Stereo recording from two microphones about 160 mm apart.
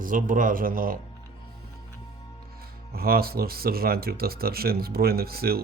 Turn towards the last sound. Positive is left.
turn(degrees=-70)  # may be behind; listen again after turning